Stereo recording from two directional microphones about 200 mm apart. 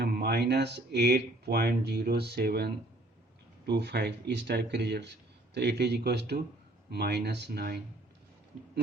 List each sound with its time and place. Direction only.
0.0 s speech: 50° right (ahead or behind)